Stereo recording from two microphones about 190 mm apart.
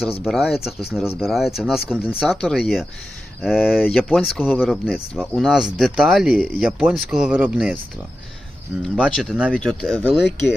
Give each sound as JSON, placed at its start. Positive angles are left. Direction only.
{"t": 0.3, "sound": "speech", "side_deg": 0}
{"t": 8.8, "sound": "speech", "side_deg": 0}